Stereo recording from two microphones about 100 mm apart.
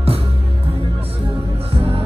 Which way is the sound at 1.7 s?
70° right (ahead or behind).